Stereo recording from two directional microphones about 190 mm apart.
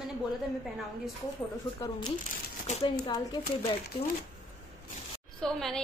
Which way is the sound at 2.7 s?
30° left (ahead or behind).